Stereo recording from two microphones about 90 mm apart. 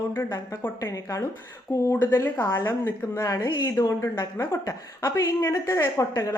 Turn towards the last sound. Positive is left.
turn(degrees=35)  # may be behind; listen again after turning